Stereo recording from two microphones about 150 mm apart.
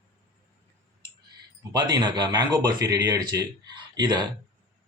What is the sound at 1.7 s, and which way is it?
Speech, 30° right (ahead or behind).